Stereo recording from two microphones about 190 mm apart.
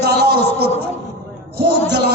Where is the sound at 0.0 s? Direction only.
60° right (ahead or behind).